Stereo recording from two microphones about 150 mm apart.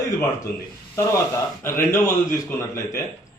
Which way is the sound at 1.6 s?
15° left (ahead or behind).